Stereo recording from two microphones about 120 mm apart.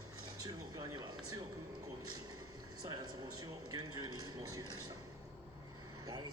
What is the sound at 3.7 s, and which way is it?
Speech, 35° right (ahead or behind).